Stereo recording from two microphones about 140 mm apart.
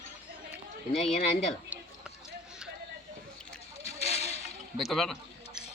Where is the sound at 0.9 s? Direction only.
45° left (ahead or behind).